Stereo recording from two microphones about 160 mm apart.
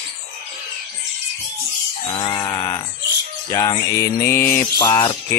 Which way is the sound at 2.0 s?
25° left (ahead or behind).